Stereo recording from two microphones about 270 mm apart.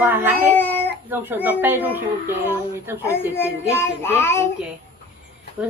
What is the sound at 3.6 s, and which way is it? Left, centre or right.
Speech, centre.